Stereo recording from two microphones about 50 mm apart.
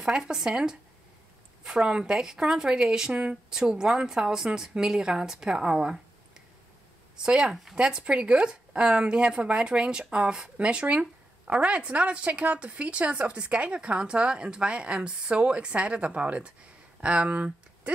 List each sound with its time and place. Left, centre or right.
0.0 s a woman's voice: centre
7.2 s a woman's voice: centre